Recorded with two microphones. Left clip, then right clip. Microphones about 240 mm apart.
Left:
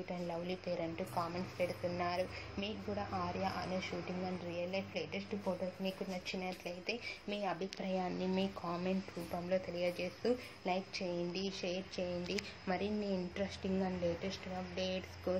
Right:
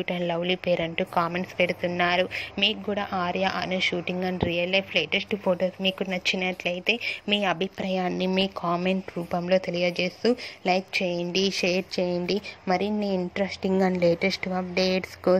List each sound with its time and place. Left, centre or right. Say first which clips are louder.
0.1 s speech: right 15 dB; right